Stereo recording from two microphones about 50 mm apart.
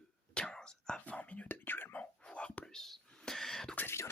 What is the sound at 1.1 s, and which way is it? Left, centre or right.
Whispering, left.